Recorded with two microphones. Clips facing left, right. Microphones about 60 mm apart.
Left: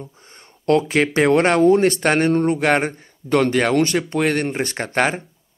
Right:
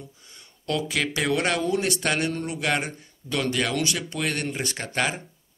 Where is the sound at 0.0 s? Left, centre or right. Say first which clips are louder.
Left 7 dB; left.